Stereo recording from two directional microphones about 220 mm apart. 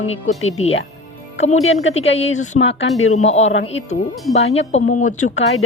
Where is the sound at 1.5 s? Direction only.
65° left (ahead or behind).